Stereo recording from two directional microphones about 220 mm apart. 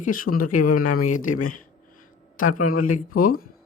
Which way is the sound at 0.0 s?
40° left (ahead or behind).